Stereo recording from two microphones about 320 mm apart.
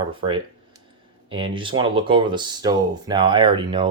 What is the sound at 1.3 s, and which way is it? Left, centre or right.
Speech, centre.